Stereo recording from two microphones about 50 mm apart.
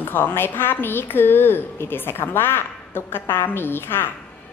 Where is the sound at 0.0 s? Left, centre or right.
Left.